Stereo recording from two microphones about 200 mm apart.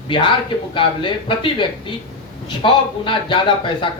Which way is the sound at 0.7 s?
25° left (ahead or behind).